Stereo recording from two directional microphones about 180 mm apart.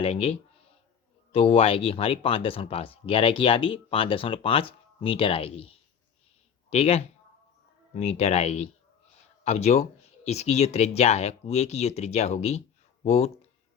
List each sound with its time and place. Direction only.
0.0 s speech: 35° left (ahead or behind)